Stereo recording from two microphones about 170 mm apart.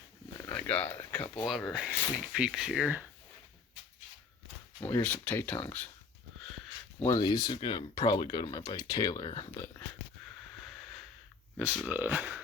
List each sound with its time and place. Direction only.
0.3 s a sound: 10° left (ahead or behind)
1.5 s speech: centre (ahead or behind)
4.8 s speech: 10° left (ahead or behind)
7.0 s speech: 20° left (ahead or behind)
10.7 s a sound: centre (ahead or behind)
11.9 s speech: 10° right (ahead or behind)